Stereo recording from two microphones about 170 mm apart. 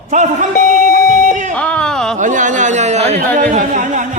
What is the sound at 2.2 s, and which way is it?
A man's voice, 50° right (ahead or behind).